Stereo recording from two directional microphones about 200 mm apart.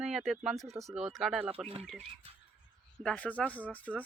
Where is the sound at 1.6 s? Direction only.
30° right (ahead or behind).